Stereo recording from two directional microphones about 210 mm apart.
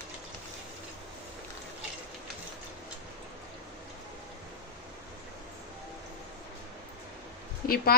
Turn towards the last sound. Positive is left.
turn(degrees=45)  # may be behind; listen again after turning